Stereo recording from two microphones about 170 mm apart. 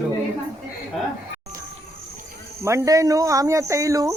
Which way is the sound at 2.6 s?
20° right (ahead or behind).